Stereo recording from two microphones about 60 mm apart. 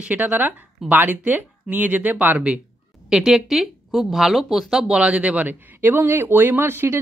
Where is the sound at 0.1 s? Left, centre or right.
Right.